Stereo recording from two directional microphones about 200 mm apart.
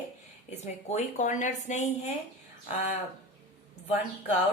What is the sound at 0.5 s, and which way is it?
A woman's voice, 35° left (ahead or behind).